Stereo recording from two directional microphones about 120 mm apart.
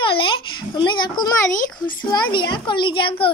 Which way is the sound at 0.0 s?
45° left (ahead or behind).